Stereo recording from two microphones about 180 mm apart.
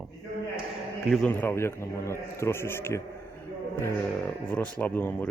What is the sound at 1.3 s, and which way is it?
A man's voice, 15° left (ahead or behind).